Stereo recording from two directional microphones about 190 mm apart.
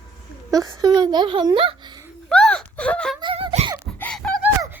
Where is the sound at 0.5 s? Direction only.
20° right (ahead or behind).